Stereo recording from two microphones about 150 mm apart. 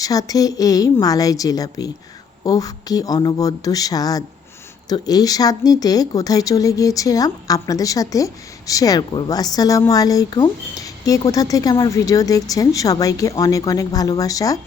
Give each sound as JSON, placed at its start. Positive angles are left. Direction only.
{"t": 0.0, "sound": "speech", "side_deg": 25}